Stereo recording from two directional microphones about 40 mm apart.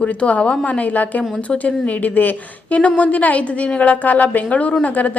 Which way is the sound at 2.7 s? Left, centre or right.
Left.